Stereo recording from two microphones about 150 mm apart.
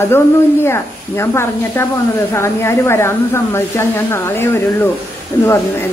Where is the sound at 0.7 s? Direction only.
15° left (ahead or behind).